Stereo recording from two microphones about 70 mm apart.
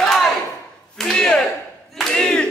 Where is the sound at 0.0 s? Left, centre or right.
Centre.